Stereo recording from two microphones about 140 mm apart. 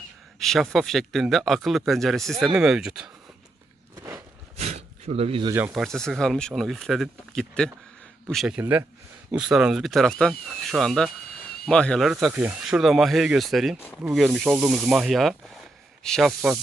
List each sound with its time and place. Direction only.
0.4 s speech: 5° left (ahead or behind)
4.6 s a sound: 50° right (ahead or behind)
5.7 s speech: centre (ahead or behind)
8.5 s speech: 10° right (ahead or behind); by 12.1 s 5° left (ahead or behind)
12.1 s speech: 5° right (ahead or behind)